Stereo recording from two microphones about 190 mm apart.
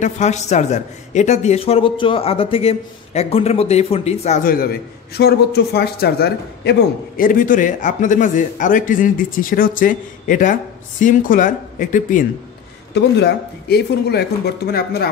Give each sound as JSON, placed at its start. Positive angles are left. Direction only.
{"t": 0.0, "sound": "a man's voice", "side_deg": 35}
{"t": 12.9, "sound": "speech", "side_deg": 60}